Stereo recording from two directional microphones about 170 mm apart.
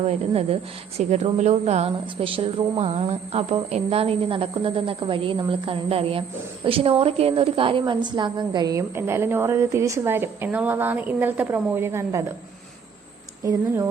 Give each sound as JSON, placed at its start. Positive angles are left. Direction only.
{"t": 0.0, "sound": "a woman's voice", "side_deg": -40}
{"t": 13.4, "sound": "speech", "side_deg": -20}